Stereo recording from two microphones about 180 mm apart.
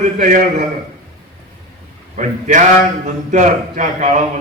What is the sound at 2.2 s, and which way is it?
A man's voice, 45° right (ahead or behind).